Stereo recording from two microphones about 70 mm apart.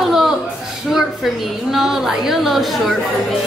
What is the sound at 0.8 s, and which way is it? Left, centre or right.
A woman's voice, centre.